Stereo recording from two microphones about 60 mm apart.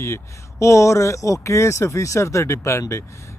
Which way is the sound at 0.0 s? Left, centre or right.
Left.